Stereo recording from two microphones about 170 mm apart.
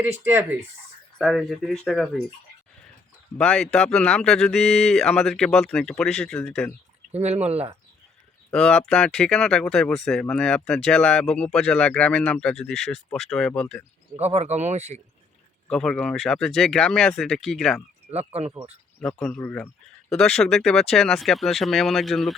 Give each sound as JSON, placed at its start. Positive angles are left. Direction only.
{"t": 0.0, "sound": "speech", "side_deg": -10}
{"t": 1.2, "sound": "speech", "side_deg": 0}
{"t": 3.3, "sound": "speech", "side_deg": 5}
{"t": 7.1, "sound": "speech", "side_deg": -40}
{"t": 8.4, "sound": "speech", "side_deg": 5}
{"t": 14.2, "sound": "speech", "side_deg": -40}
{"t": 15.7, "sound": "speech", "side_deg": 5}
{"t": 18.1, "sound": "speech", "side_deg": -40}
{"t": 18.9, "sound": "speech", "side_deg": 5}